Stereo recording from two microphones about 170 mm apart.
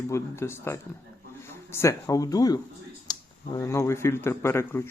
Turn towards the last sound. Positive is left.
turn(degrees=15)  # may be behind; listen again after turning